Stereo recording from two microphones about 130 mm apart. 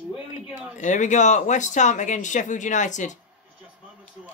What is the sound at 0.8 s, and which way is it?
Speech, 70° left (ahead or behind).